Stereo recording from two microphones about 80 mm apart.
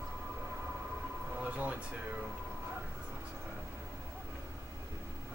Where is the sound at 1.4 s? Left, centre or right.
Centre.